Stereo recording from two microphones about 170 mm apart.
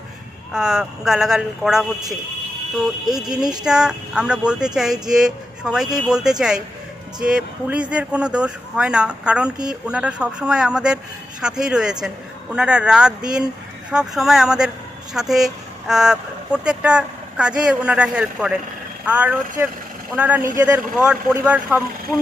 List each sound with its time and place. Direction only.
0.5 s speech: 5° right (ahead or behind)
3.2 s speech: 25° right (ahead or behind)
3.6 s speech: 5° right (ahead or behind)
7.2 s speech: 5° right (ahead or behind)